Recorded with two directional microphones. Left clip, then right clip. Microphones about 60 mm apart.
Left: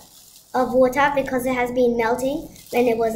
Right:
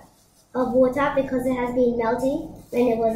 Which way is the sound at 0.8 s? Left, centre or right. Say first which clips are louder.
Left 3 dB; left.